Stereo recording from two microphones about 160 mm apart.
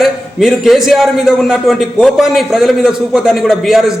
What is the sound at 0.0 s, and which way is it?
A man's voice, centre (ahead or behind).